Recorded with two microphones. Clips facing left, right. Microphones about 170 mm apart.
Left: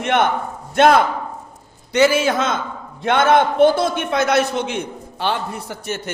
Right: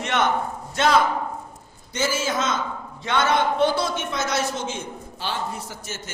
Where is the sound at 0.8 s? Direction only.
55° left (ahead or behind).